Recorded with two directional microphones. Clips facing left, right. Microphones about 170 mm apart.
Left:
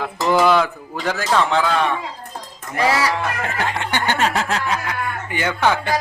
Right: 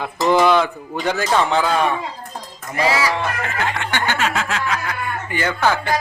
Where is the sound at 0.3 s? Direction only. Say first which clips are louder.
Right 1 dB; 5° left (ahead or behind).